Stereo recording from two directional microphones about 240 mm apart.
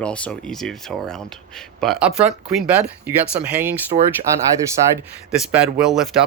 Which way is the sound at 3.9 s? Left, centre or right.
Right.